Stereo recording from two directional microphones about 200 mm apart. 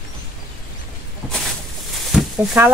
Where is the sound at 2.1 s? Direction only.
Centre (ahead or behind).